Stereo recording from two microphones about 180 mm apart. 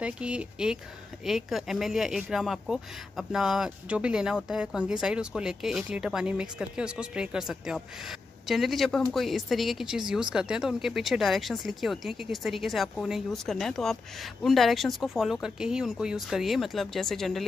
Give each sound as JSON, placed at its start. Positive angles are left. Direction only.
{"t": 0.0, "sound": "speech", "side_deg": -5}